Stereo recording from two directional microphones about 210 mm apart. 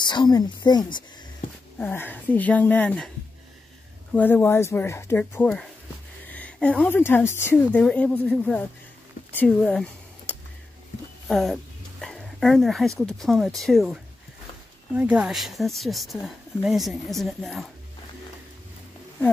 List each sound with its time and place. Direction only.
0.0 s a woman's voice: 20° left (ahead or behind)
1.8 s speech: 10° left (ahead or behind)
4.1 s speech: 10° left (ahead or behind)
11.2 s a sound: centre (ahead or behind)
13.0 s a woman's voice: centre (ahead or behind)
15.0 s a woman's voice: 5° right (ahead or behind)